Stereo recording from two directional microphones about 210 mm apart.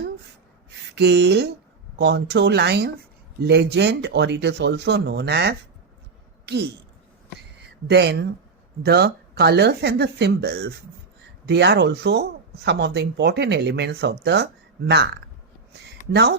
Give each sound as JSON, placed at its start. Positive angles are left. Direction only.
{"t": 0.9, "sound": "speech", "side_deg": -55}
{"t": 6.4, "sound": "a sound", "side_deg": -55}
{"t": 7.9, "sound": "speech", "side_deg": -50}